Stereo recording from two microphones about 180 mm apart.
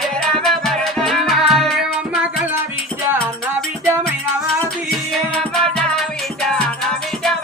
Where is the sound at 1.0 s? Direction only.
Centre (ahead or behind).